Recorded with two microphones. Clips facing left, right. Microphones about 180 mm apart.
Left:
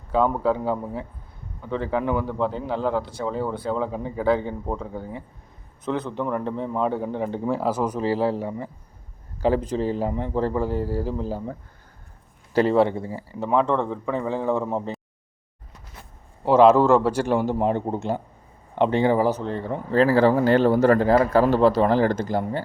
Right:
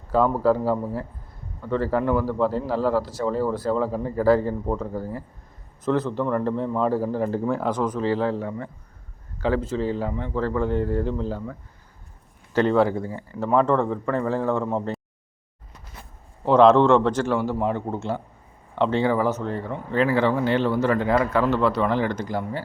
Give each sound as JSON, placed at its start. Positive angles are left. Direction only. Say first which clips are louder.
{"t": 0.1, "sound": "a man's voice", "louder": "right 2 dB", "side_deg": 0}
{"t": 10.1, "sound": "speech", "louder": "left 2 dB", "side_deg": 35}
{"t": 10.3, "sound": "a man's voice", "louder": "even", "side_deg": 15}
{"t": 10.7, "sound": "speech", "louder": "right 2 dB", "side_deg": 5}
{"t": 12.5, "sound": "speech", "louder": "left 1 dB", "side_deg": 5}
{"t": 13.0, "sound": "speech", "louder": "right 1 dB", "side_deg": 30}
{"t": 13.4, "sound": "speech", "louder": "right 2 dB", "side_deg": 0}
{"t": 16.5, "sound": "a man's voice", "louder": "even", "side_deg": 5}
{"t": 19.4, "sound": "speech", "louder": "left 1 dB", "side_deg": 25}